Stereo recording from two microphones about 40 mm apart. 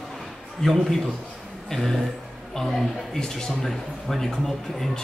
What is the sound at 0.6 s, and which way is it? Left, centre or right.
A man's voice, centre.